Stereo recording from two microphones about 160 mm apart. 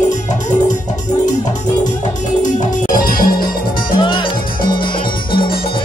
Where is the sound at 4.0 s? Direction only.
30° left (ahead or behind).